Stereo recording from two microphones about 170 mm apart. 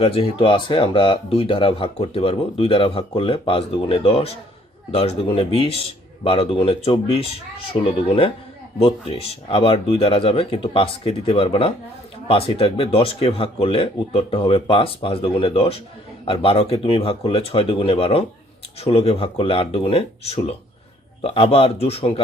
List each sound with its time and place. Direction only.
0.0 s speech: 35° left (ahead or behind)